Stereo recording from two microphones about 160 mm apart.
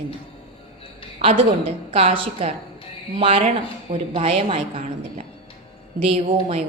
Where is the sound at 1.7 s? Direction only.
35° right (ahead or behind).